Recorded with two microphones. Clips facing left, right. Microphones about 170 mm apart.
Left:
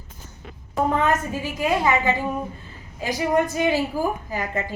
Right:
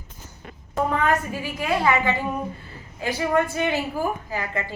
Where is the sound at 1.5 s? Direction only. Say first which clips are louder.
Left 1 dB; 20° left (ahead or behind).